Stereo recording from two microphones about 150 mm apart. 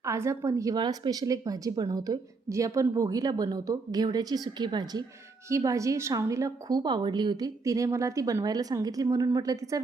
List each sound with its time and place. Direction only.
0.0 s a woman's voice: 20° right (ahead or behind)